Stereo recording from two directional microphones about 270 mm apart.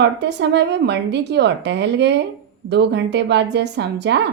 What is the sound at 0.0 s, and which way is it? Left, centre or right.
Speech, right.